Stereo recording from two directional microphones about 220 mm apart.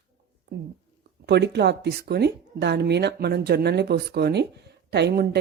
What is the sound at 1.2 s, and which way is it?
Speech, 50° right (ahead or behind).